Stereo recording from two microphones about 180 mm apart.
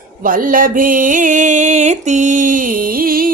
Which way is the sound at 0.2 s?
50° right (ahead or behind).